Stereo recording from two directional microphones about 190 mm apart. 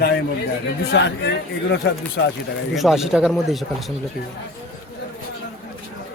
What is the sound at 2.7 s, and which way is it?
Speech, centre (ahead or behind).